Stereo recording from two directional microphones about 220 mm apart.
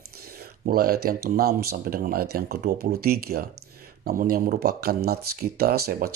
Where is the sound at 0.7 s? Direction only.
45° right (ahead or behind).